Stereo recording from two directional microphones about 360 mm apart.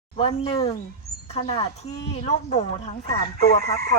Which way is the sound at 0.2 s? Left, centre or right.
Centre.